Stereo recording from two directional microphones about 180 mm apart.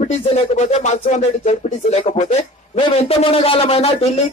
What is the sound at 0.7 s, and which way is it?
Speech, 40° left (ahead or behind).